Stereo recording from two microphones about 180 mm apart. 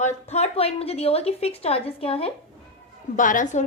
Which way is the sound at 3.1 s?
45° left (ahead or behind).